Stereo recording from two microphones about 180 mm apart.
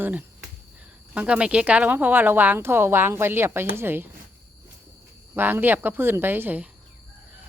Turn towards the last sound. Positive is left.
turn(degrees=-10)  # may be behind; listen again after turning